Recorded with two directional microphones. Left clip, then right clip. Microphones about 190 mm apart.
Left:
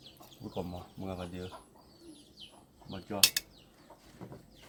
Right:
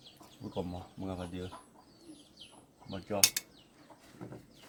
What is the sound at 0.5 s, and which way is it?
Speech, 5° left (ahead or behind).